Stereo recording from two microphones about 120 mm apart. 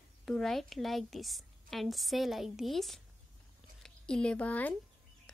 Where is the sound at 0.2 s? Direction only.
Centre (ahead or behind).